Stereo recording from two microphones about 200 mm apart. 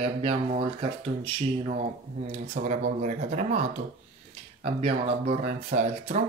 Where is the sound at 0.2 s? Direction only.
30° right (ahead or behind).